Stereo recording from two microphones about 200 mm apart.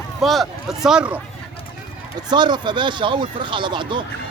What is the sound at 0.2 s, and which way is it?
Speech, centre (ahead or behind).